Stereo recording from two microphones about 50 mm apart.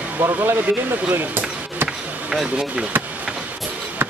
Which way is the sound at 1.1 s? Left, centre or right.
Right.